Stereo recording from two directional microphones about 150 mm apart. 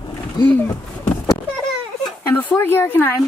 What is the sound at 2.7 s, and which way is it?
Speech, 15° left (ahead or behind).